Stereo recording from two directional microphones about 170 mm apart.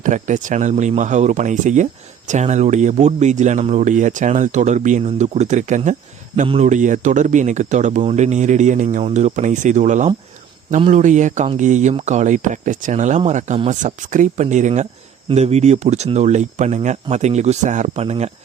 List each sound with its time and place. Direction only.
0.0 s speech: 50° right (ahead or behind)